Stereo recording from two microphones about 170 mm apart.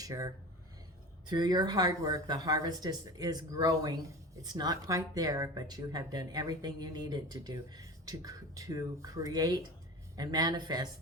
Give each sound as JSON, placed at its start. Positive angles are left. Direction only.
{"t": 0.0, "sound": "speech", "side_deg": -20}
{"t": 1.3, "sound": "speech", "side_deg": -25}